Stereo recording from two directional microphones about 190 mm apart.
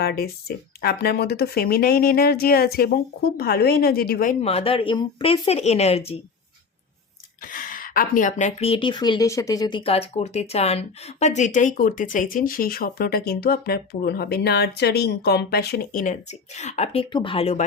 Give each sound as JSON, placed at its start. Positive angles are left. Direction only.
{"t": 0.0, "sound": "a woman's voice", "side_deg": 55}
{"t": 7.4, "sound": "a woman's voice", "side_deg": 45}